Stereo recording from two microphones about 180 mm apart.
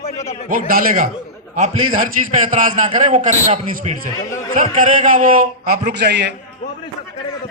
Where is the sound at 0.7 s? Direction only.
50° right (ahead or behind); by 6.3 s 70° right (ahead or behind).